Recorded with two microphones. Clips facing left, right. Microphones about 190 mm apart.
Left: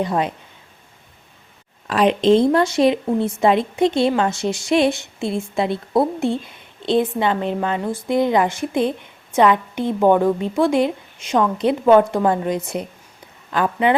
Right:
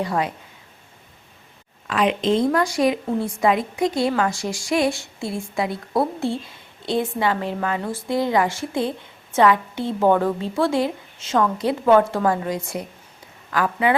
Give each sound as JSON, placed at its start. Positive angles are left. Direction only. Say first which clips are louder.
{"t": 0.0, "sound": "a woman's voice", "louder": "left 3 dB", "side_deg": 20}
{"t": 1.9, "sound": "a woman's voice", "louder": "left 5 dB", "side_deg": 35}